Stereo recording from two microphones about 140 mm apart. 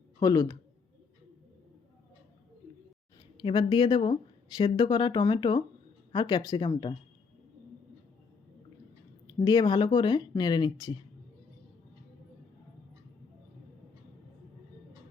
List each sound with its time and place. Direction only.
0.2 s speech: 25° left (ahead or behind)
3.3 s speech: 35° left (ahead or behind)
9.4 s speech: 30° left (ahead or behind)